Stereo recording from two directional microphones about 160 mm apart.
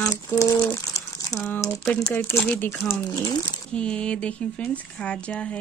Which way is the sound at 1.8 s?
5° left (ahead or behind).